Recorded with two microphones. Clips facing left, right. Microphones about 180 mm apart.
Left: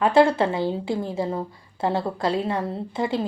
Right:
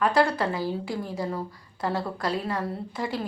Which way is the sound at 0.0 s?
25° left (ahead or behind).